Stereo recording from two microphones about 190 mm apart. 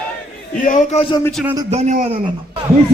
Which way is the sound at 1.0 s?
25° left (ahead or behind).